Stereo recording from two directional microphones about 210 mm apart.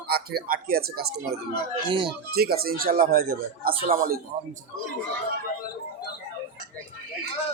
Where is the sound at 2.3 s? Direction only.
45° right (ahead or behind).